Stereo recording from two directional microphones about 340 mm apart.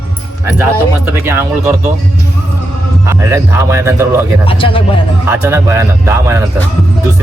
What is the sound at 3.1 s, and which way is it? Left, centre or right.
Speech, centre.